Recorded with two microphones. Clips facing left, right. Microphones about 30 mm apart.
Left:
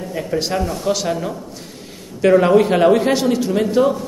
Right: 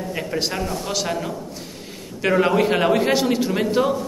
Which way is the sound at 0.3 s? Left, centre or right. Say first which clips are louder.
Left 5 dB; centre.